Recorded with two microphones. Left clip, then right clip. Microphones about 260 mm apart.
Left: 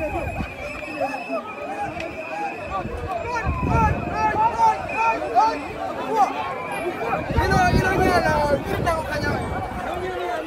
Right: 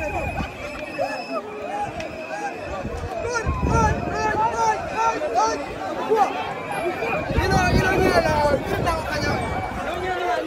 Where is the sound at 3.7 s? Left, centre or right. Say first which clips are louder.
Even; left.